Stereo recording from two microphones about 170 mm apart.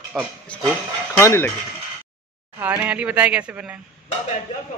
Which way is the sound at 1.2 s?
15° left (ahead or behind).